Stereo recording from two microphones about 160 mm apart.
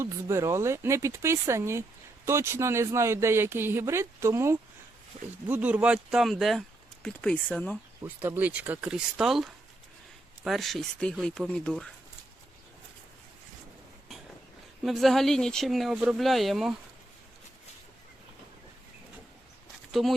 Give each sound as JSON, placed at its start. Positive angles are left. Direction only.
{"t": 0.0, "sound": "speech", "side_deg": -15}
{"t": 8.0, "sound": "speech", "side_deg": -15}
{"t": 14.8, "sound": "speech", "side_deg": 0}
{"t": 19.9, "sound": "speech", "side_deg": 0}